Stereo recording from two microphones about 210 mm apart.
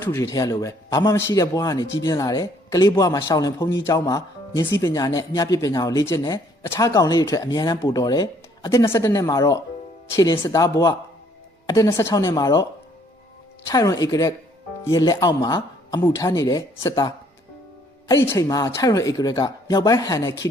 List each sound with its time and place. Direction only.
0.0 s speech: 15° left (ahead or behind)
13.7 s speech: 15° left (ahead or behind)